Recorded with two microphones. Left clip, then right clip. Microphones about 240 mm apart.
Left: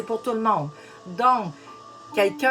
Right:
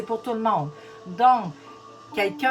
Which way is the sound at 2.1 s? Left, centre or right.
Centre.